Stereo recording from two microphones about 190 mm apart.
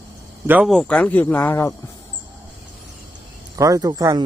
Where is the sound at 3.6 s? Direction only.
15° right (ahead or behind).